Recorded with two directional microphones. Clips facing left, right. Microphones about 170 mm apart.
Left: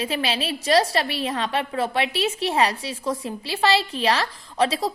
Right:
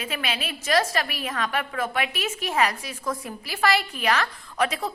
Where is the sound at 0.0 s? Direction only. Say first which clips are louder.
Left 5 dB; 30° left (ahead or behind).